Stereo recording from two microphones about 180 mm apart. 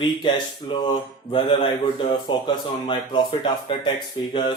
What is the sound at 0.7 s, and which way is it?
A man's voice, 25° left (ahead or behind).